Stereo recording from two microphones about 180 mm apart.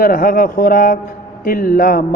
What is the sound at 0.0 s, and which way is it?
Speech, 50° left (ahead or behind).